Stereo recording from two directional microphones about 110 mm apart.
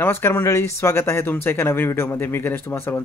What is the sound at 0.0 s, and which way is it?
Speech, 20° left (ahead or behind).